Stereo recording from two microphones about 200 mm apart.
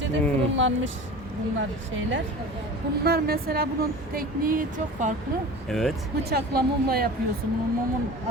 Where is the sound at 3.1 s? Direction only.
50° right (ahead or behind).